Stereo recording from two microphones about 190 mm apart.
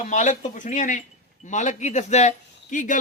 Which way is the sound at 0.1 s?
40° left (ahead or behind).